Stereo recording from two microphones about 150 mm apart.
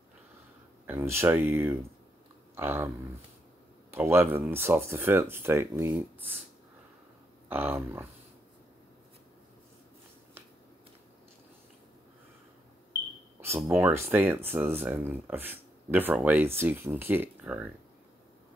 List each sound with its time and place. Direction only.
0.8 s speech: 15° right (ahead or behind)
3.9 s speech: 15° right (ahead or behind)
7.4 s speech: 15° right (ahead or behind)
13.4 s speech: 15° right (ahead or behind)